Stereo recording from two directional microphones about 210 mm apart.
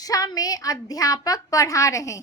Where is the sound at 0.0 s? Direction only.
15° left (ahead or behind).